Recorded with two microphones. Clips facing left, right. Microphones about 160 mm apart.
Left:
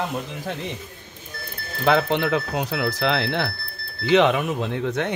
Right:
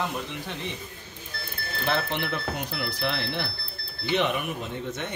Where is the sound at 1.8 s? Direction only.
90° left.